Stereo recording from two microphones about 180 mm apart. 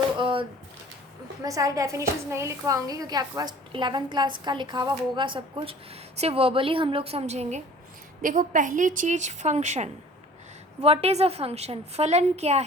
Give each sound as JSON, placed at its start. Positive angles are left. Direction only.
{"t": 0.2, "sound": "a sound", "side_deg": -25}
{"t": 1.4, "sound": "a woman's voice", "side_deg": -20}
{"t": 8.2, "sound": "a woman's voice", "side_deg": -45}